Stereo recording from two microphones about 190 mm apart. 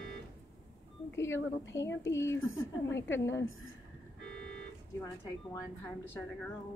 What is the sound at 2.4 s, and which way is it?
Speech, 90° left.